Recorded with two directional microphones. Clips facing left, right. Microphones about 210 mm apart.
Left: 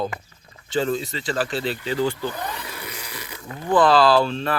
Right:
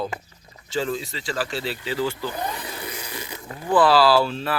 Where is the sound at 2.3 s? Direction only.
25° right (ahead or behind).